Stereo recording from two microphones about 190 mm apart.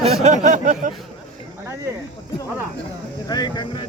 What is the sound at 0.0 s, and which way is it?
Speech, 35° right (ahead or behind).